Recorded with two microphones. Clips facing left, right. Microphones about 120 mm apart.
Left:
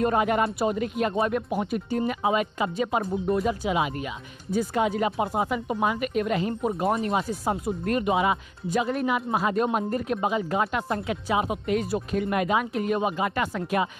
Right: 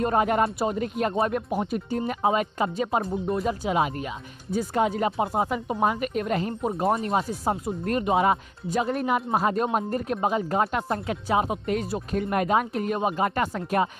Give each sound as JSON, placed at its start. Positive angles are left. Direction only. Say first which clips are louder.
{"t": 0.0, "sound": "speech", "louder": "even", "side_deg": -35}
{"t": 3.1, "sound": "speech", "louder": "left 2 dB", "side_deg": 0}
{"t": 3.4, "sound": "speech", "louder": "right 1 dB", "side_deg": -40}
{"t": 7.0, "sound": "speech", "louder": "even", "side_deg": -30}